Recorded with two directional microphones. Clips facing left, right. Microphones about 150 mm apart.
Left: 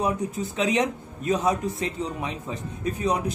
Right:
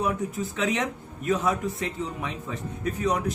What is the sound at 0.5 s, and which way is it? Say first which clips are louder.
A man's voice: left 5 dB; 20° left (ahead or behind).